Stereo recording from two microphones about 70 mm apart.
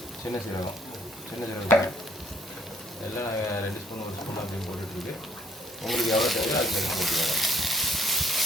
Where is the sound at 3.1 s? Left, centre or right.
Left.